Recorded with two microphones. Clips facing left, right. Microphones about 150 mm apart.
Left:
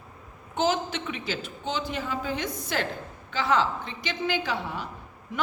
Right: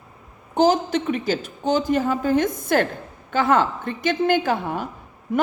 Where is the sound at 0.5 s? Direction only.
40° right (ahead or behind).